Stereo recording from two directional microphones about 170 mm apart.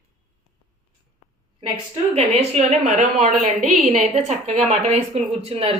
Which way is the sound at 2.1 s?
35° right (ahead or behind).